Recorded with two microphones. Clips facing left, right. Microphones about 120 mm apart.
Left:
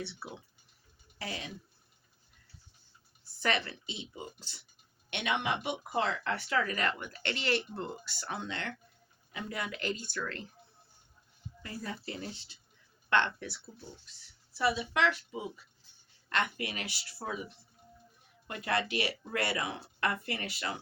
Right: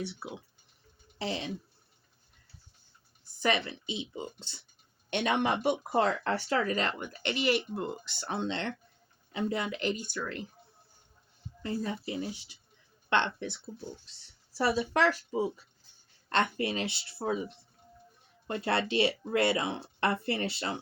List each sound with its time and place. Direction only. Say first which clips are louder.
0.0 s speech: right 4 dB; 15° right (ahead or behind)
1.2 s speech: right 6 dB; 25° right (ahead or behind)
3.4 s speech: right 3 dB; 15° right (ahead or behind)
5.1 s speech: right 5 dB; 40° right (ahead or behind); by 10.4 s 15° right (ahead or behind)
11.6 s speech: right 7 dB; 25° right (ahead or behind)
14.0 s speech: even; 35° right (ahead or behind)